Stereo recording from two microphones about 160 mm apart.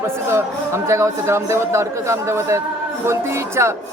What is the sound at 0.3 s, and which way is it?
Speech, 15° right (ahead or behind).